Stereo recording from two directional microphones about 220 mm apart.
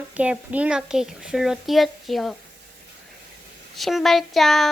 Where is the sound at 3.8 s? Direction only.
Centre (ahead or behind).